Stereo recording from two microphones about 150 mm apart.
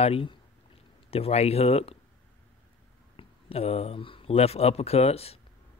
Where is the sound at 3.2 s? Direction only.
40° left (ahead or behind).